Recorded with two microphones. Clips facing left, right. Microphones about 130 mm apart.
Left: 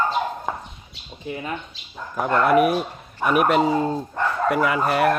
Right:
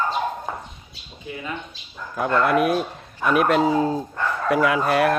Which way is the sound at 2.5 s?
5° left (ahead or behind).